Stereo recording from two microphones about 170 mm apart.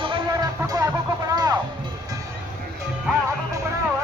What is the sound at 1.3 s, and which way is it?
Speech, 20° right (ahead or behind).